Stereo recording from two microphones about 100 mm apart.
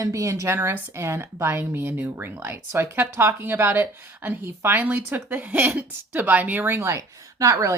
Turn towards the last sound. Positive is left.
turn(degrees=-35)  # may be behind; listen again after turning